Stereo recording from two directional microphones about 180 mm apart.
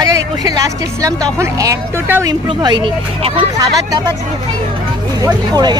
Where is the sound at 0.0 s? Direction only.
20° right (ahead or behind).